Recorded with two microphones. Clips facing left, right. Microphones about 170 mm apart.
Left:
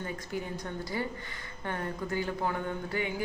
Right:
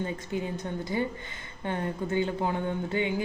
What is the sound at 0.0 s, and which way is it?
Speech, 20° right (ahead or behind).